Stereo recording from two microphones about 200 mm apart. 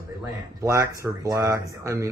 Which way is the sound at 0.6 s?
15° right (ahead or behind).